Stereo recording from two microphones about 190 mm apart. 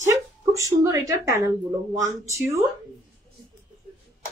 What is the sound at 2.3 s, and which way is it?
Speech, 15° right (ahead or behind).